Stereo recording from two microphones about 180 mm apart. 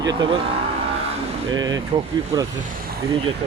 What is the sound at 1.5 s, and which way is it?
Speech, 20° right (ahead or behind).